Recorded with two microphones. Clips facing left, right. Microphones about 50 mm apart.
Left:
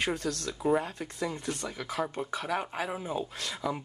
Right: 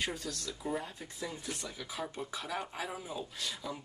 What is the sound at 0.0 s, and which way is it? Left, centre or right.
Speech, left.